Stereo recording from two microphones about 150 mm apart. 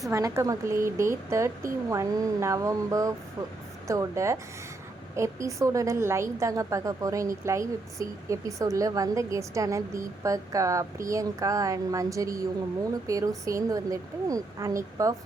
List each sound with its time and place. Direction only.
0.1 s a woman's voice: 20° right (ahead or behind)